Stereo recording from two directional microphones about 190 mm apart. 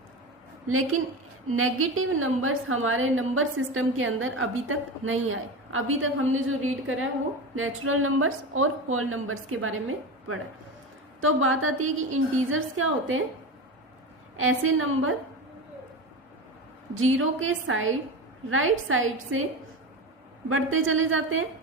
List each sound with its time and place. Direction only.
0.7 s a woman's voice: 90° right
11.2 s a woman's voice: 90° right
14.3 s a woman's voice: 90° right
16.9 s a woman's voice: 90° right
20.5 s a woman's voice: 90° right